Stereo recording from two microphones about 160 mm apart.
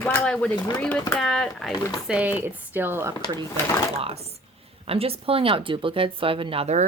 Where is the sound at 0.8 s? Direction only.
5° left (ahead or behind).